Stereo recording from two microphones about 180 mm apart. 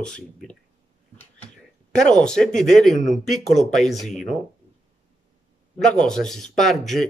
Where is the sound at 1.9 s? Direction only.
5° left (ahead or behind).